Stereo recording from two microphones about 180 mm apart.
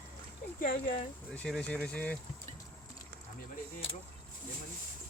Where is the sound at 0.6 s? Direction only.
45° left (ahead or behind).